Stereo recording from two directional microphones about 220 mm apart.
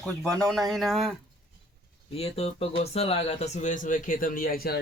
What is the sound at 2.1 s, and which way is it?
Speech, 25° left (ahead or behind).